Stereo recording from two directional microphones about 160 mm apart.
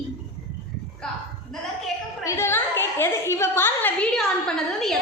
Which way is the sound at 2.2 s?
15° left (ahead or behind).